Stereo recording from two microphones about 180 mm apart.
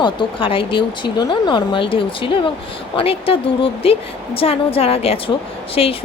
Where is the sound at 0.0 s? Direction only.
25° left (ahead or behind).